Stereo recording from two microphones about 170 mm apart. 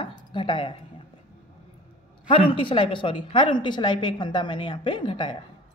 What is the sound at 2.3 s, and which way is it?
A woman's voice, 30° left (ahead or behind).